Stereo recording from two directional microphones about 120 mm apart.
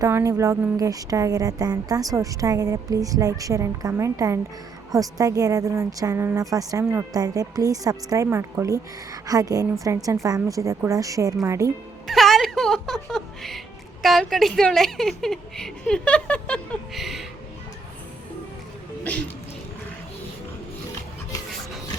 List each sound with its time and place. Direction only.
0.0 s a woman's voice: 25° right (ahead or behind)
12.0 s a woman's voice: centre (ahead or behind)
16.9 s a woman's voice: centre (ahead or behind)